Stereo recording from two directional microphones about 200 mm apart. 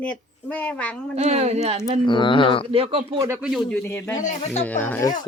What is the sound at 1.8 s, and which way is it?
Speech, 25° left (ahead or behind).